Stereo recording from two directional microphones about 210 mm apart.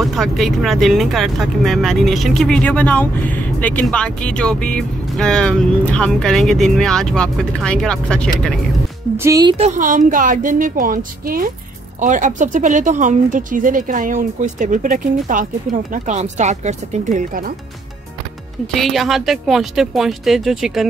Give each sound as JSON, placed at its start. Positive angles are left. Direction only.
{"t": 0.0, "sound": "speech", "side_deg": 0}
{"t": 9.1, "sound": "speech", "side_deg": -15}
{"t": 9.6, "sound": "speech", "side_deg": -40}
{"t": 18.8, "sound": "speech", "side_deg": 0}